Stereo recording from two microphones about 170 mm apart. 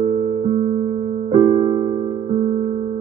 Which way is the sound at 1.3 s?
50° right (ahead or behind).